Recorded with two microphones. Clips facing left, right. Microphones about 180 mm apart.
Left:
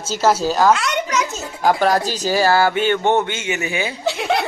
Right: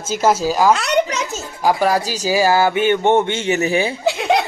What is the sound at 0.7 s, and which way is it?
Children playing, 35° right (ahead or behind).